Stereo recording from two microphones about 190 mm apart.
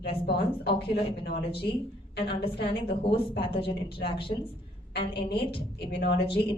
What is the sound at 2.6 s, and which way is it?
A woman's voice, 30° left (ahead or behind).